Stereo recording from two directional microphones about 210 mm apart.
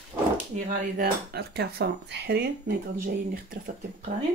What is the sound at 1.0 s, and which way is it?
Speech, 50° right (ahead or behind).